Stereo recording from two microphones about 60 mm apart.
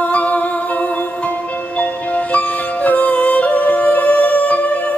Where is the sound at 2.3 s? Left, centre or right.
Left.